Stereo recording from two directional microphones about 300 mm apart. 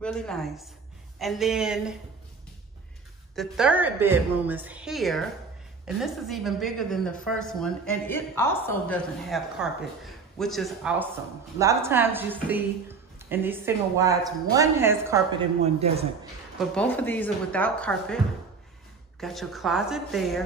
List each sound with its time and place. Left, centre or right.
0.0 s a woman's voice: centre
3.3 s a woman's voice: centre
15.6 s a man's voice: centre
16.5 s a woman's voice: centre